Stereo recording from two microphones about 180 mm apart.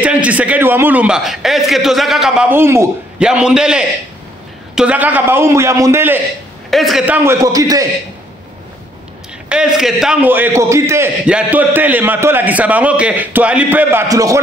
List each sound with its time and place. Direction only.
0.0 s a man's voice: 10° right (ahead or behind)
6.7 s a man's voice: centre (ahead or behind)
7.2 s a man's voice: 20° right (ahead or behind)
9.5 s a man's voice: 5° right (ahead or behind)